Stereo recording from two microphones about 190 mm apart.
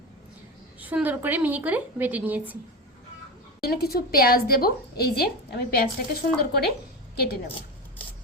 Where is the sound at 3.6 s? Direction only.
55° left (ahead or behind).